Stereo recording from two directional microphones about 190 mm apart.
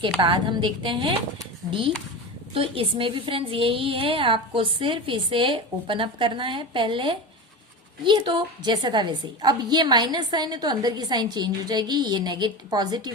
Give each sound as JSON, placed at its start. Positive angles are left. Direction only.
{"t": 0.2, "sound": "a woman's voice", "side_deg": -25}
{"t": 2.6, "sound": "a woman's voice", "side_deg": -30}